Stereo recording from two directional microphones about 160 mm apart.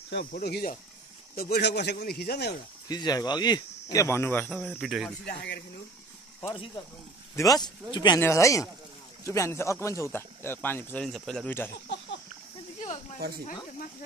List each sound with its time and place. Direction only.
0.1 s speech: 85° left
2.9 s speech: 25° left (ahead or behind)
4.5 s cricket: centre (ahead or behind)
5.2 s speech: 90° left
7.3 s speech: 25° left (ahead or behind)
11.1 s cricket: centre (ahead or behind)